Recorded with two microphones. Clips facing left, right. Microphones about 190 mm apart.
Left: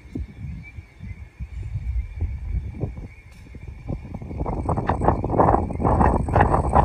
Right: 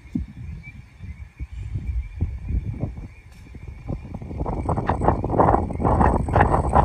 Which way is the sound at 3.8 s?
5° left (ahead or behind).